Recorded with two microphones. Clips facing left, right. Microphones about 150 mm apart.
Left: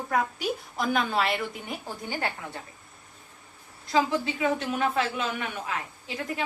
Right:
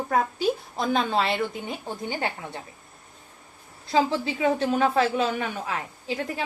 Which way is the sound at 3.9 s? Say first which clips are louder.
Right 2 dB; 35° right (ahead or behind).